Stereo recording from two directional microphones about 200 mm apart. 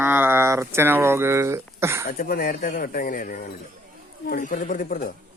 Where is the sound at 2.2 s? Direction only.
50° left (ahead or behind).